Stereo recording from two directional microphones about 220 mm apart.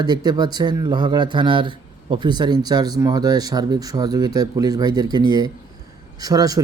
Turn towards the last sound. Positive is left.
turn(degrees=-15)  # may be behind; listen again after turning